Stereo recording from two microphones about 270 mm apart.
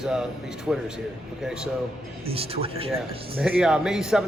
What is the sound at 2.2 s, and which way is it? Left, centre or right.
Speech, right.